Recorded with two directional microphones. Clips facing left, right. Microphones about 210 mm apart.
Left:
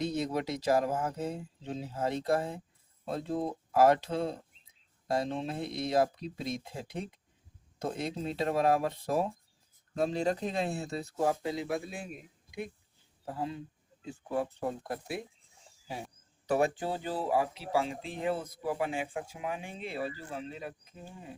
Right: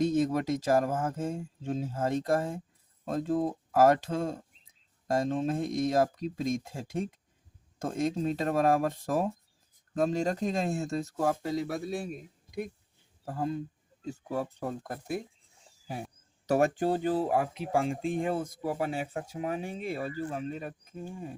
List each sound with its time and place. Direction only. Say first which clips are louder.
0.0 s speech: right 5 dB; 45° right (ahead or behind)
16.5 s speech: right 4 dB; 45° right (ahead or behind)